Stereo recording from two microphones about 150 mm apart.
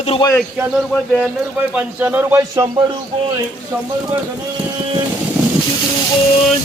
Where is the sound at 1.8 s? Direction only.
10° right (ahead or behind).